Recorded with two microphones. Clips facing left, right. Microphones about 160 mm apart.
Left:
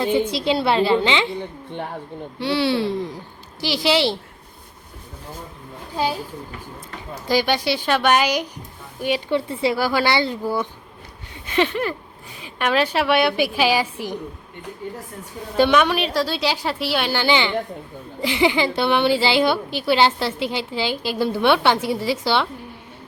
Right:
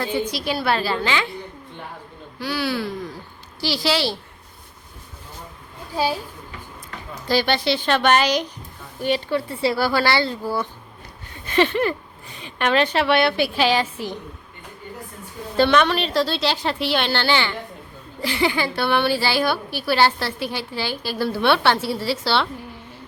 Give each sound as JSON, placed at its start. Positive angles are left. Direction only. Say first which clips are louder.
{"t": 0.0, "sound": "a woman's voice", "louder": "left 4 dB", "side_deg": 25}
{"t": 2.4, "sound": "a woman's voice", "louder": "left 4 dB", "side_deg": 25}
{"t": 7.3, "sound": "a woman's voice", "louder": "even", "side_deg": 15}
{"t": 15.5, "sound": "a woman's voice", "louder": "left 1 dB", "side_deg": 10}